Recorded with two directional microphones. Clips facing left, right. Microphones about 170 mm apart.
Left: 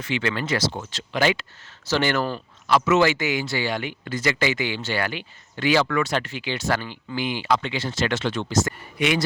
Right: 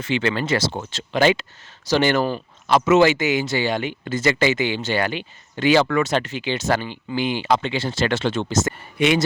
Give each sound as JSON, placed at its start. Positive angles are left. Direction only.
{"t": 0.0, "sound": "speech", "side_deg": -25}